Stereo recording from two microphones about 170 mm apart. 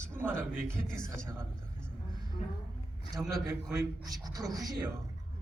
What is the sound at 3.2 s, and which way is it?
A man's voice, 20° right (ahead or behind).